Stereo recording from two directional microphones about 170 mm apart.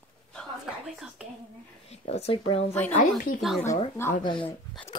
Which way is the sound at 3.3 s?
Centre (ahead or behind).